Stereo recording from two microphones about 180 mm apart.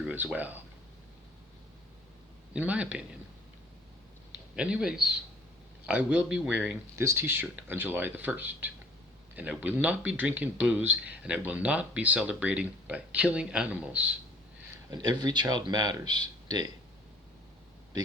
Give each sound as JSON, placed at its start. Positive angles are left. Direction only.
{"t": 0.0, "sound": "speech", "side_deg": -5}
{"t": 2.5, "sound": "speech", "side_deg": -5}
{"t": 4.5, "sound": "speech", "side_deg": -5}
{"t": 14.8, "sound": "speech", "side_deg": -20}